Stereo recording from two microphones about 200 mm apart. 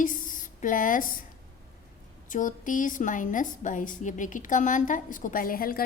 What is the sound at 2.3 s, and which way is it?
A woman's voice, 40° left (ahead or behind).